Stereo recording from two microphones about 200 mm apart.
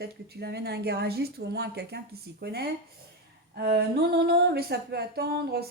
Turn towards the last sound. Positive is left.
turn(degrees=-50)  # may be behind; listen again after turning